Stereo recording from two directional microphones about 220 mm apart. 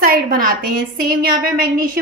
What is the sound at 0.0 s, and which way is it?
A woman's voice, 40° right (ahead or behind).